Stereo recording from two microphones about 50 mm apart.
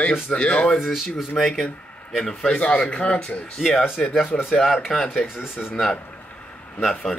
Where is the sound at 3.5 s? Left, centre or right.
Centre.